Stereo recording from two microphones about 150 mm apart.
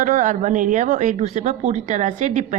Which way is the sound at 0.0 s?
55° right (ahead or behind).